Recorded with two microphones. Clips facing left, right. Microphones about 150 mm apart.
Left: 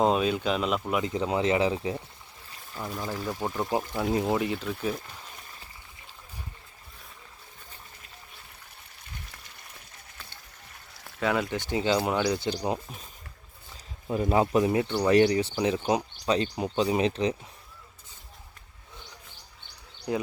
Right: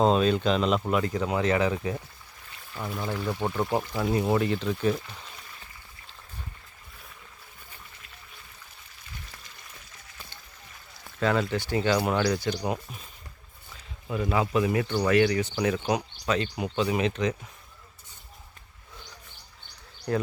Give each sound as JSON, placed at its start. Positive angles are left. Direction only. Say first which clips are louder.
{"t": 0.0, "sound": "speech", "louder": "right 2 dB", "side_deg": 10}
{"t": 1.1, "sound": "speech", "louder": "even", "side_deg": 25}
{"t": 2.8, "sound": "speech", "louder": "right 2 dB", "side_deg": 5}
{"t": 4.1, "sound": "speech", "louder": "right 1 dB", "side_deg": 25}
{"t": 4.4, "sound": "speech", "louder": "right 3 dB", "side_deg": 10}
{"t": 11.2, "sound": "speech", "louder": "right 2 dB", "side_deg": 10}
{"t": 12.4, "sound": "speech", "louder": "even", "side_deg": 25}
{"t": 14.1, "sound": "speech", "louder": "left 2 dB", "side_deg": 35}
{"t": 14.7, "sound": "speech", "louder": "left 1 dB", "side_deg": 20}
{"t": 15.1, "sound": "speech", "louder": "left 2 dB", "side_deg": 30}
{"t": 20.1, "sound": "speech", "louder": "right 2 dB", "side_deg": 15}